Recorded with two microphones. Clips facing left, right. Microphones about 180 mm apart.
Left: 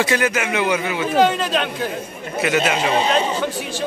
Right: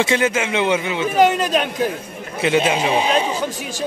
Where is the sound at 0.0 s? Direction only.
25° right (ahead or behind).